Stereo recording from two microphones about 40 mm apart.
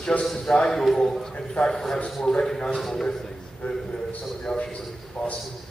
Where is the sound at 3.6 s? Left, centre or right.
Left.